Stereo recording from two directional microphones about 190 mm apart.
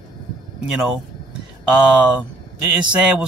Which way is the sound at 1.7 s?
5° right (ahead or behind).